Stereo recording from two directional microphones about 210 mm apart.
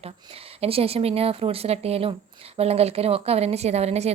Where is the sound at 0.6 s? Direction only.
30° right (ahead or behind).